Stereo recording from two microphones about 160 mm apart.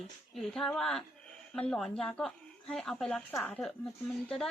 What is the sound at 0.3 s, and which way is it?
Speech, centre (ahead or behind).